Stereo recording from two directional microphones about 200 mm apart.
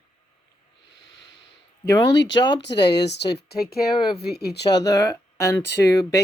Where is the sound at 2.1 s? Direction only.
60° left (ahead or behind).